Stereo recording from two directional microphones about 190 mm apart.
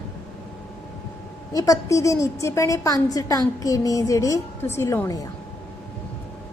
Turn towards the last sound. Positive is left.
turn(degrees=15)  # may be behind; listen again after turning